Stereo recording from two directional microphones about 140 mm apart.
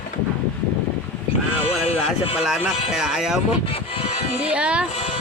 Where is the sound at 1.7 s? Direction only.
45° left (ahead or behind).